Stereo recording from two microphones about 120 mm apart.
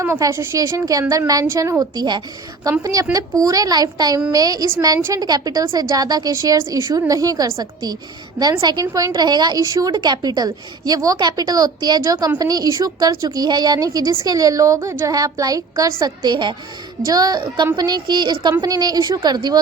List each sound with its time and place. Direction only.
0.0 s a woman's voice: 20° right (ahead or behind)